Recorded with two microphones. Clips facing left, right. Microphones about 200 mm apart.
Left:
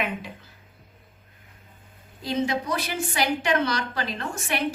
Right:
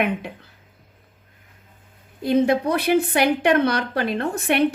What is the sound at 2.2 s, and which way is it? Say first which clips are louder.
A woman's voice: right 8 dB; 55° right (ahead or behind).